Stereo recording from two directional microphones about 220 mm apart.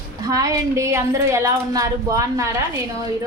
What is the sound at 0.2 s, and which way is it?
A woman's voice, 15° right (ahead or behind).